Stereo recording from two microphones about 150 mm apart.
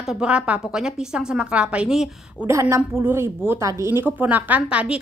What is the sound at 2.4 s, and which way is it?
A woman's voice, 20° right (ahead or behind).